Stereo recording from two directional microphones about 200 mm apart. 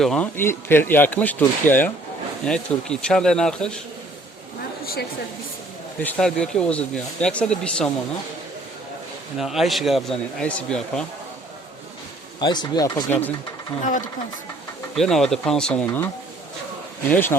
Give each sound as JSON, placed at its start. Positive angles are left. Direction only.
{"t": 0.0, "sound": "speech", "side_deg": 5}
{"t": 6.0, "sound": "speech", "side_deg": 5}
{"t": 9.4, "sound": "speech", "side_deg": 0}
{"t": 12.4, "sound": "speech", "side_deg": 20}
{"t": 14.9, "sound": "speech", "side_deg": 0}
{"t": 17.1, "sound": "speech", "side_deg": 10}